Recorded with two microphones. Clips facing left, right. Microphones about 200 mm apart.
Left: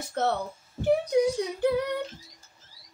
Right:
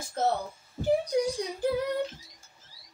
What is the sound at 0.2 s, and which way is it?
Speech, 65° left (ahead or behind).